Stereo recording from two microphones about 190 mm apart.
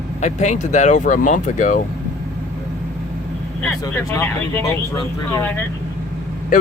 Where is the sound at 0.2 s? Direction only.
35° left (ahead or behind).